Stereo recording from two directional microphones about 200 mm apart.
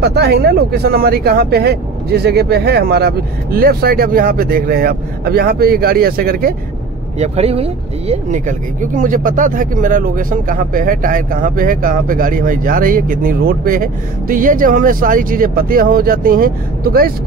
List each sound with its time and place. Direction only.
0.0 s speech: 50° right (ahead or behind)
7.2 s speech: 30° right (ahead or behind); by 17.1 s 50° right (ahead or behind)